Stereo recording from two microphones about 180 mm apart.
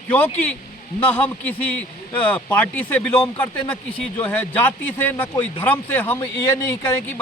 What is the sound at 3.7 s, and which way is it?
A man's voice, 10° left (ahead or behind).